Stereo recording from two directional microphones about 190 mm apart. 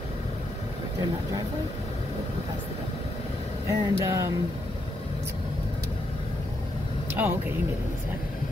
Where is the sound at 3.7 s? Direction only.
15° right (ahead or behind).